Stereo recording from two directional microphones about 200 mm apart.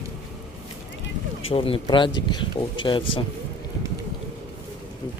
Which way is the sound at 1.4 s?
30° left (ahead or behind).